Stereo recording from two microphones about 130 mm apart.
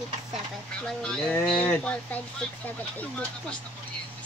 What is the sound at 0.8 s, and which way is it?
Speech, 5° left (ahead or behind).